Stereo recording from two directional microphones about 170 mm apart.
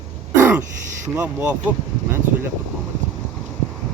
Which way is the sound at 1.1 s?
10° right (ahead or behind).